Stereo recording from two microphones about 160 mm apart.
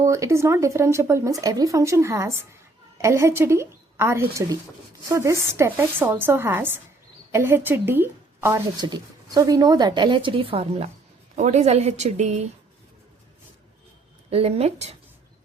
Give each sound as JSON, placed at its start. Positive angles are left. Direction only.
{"t": 0.0, "sound": "a woman's voice", "side_deg": -20}
{"t": 14.3, "sound": "a woman's voice", "side_deg": -40}